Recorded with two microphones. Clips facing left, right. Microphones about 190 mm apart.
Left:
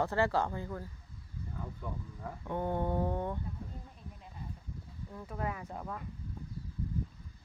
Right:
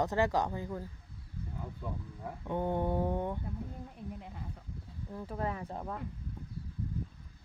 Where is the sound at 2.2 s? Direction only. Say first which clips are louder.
Right 1 dB; 15° right (ahead or behind).